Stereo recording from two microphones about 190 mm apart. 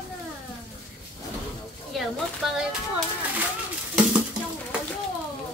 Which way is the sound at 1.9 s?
Centre (ahead or behind).